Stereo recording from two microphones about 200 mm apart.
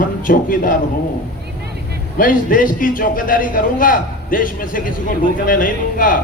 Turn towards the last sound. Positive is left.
turn(degrees=45)  # may be behind; listen again after turning